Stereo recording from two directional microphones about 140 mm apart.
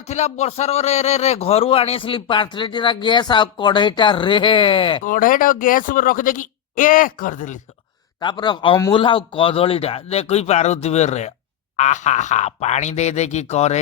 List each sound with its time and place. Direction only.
0.1 s a man's voice: 55° left (ahead or behind); by 5.0 s 40° left (ahead or behind)
5.0 s speech: 75° left (ahead or behind)
8.2 s a man's voice: 35° left (ahead or behind); by 13.7 s 50° left (ahead or behind)